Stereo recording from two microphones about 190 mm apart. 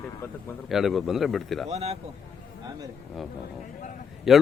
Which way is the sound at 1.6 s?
35° right (ahead or behind).